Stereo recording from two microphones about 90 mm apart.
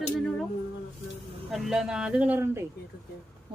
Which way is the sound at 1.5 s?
5° right (ahead or behind).